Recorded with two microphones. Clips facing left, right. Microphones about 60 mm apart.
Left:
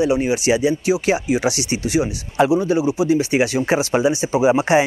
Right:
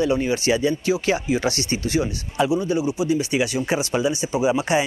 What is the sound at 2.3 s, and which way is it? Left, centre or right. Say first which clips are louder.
Speech: left 5 dB; left.